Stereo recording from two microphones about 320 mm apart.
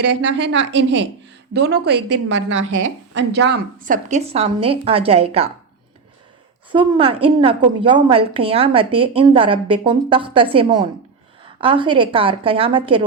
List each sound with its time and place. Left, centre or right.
0.0 s a woman's voice: right; by 5.5 s centre
6.7 s a woman's voice: centre